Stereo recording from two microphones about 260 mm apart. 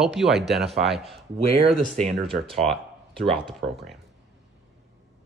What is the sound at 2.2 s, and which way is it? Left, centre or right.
Speech, centre.